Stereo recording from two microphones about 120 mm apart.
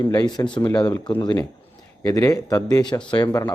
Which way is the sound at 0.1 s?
35° left (ahead or behind).